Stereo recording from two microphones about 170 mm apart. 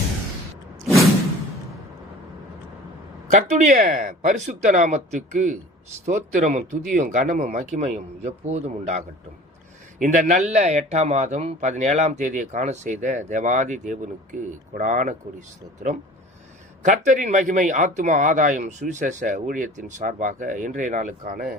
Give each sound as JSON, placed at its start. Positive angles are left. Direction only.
{"t": 3.4, "sound": "speech", "side_deg": -45}
{"t": 10.0, "sound": "speech", "side_deg": -50}